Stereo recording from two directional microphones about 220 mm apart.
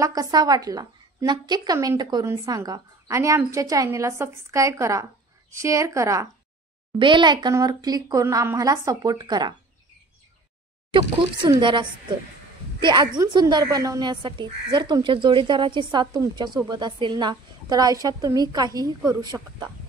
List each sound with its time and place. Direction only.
0.0 s a woman's voice: 15° right (ahead or behind)
10.9 s a woman's voice: 25° right (ahead or behind)